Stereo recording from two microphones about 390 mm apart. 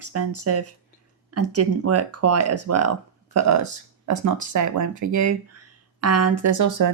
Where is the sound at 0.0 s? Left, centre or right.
Right.